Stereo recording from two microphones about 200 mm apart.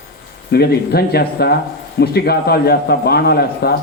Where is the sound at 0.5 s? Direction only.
50° left (ahead or behind).